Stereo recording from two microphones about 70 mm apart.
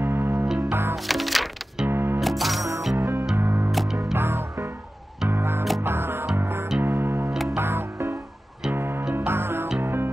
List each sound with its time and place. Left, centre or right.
0.0 s music: right
0.9 s music: centre
1.9 s music: right
2.1 s music: centre
3.0 s music: right
3.7 s music: centre
4.0 s music: right